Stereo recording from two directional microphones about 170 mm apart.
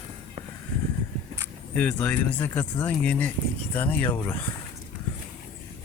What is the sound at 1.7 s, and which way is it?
Speech, 10° left (ahead or behind).